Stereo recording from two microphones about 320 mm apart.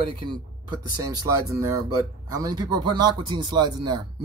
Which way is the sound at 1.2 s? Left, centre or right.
Centre.